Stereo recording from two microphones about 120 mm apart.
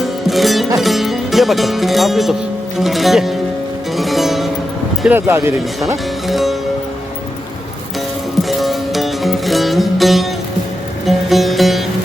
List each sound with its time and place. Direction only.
0.0 s music: centre (ahead or behind)
0.8 s speech: centre (ahead or behind)
2.7 s music: centre (ahead or behind)
5.0 s speech: 15° right (ahead or behind)
6.2 s music: centre (ahead or behind)
8.4 s music: centre (ahead or behind)